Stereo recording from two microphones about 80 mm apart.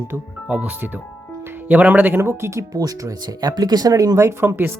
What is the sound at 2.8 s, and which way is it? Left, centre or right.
Speech, right.